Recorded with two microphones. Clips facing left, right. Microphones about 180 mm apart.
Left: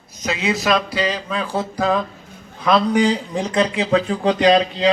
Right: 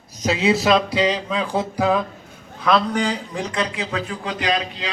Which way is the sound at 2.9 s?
20° left (ahead or behind).